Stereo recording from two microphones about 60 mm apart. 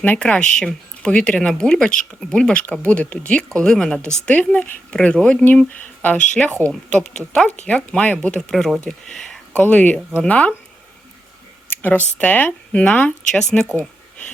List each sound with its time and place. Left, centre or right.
0.2 s speech: centre
4.3 s speech: left
6.6 s speech: centre
9.6 s speech: left
11.7 s a sound: left
12.2 s speech: left